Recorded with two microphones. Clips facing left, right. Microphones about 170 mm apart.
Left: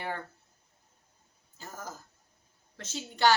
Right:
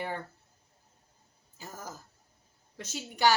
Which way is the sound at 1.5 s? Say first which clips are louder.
Even; 15° right (ahead or behind).